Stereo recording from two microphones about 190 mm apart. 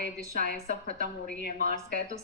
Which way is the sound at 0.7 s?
45° right (ahead or behind).